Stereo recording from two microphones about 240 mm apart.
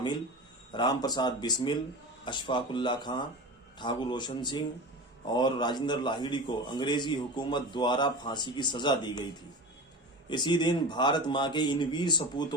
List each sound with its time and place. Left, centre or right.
0.7 s a man's voice: centre
10.2 s a man's voice: centre